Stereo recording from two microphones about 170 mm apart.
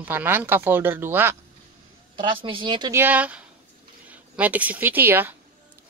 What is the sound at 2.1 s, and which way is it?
Speech, 30° right (ahead or behind).